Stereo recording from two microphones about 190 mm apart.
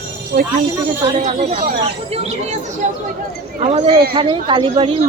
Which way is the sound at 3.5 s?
30° right (ahead or behind).